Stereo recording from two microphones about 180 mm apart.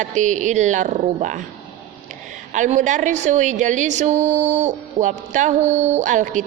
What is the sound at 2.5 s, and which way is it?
A woman's voice, 40° right (ahead or behind).